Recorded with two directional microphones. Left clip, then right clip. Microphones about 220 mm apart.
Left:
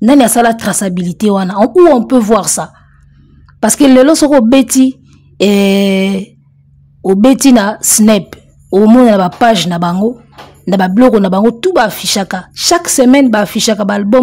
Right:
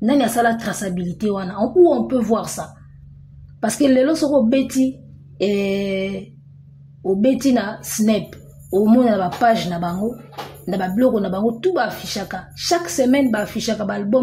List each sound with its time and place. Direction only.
0.0 s a woman's voice: 35° left (ahead or behind)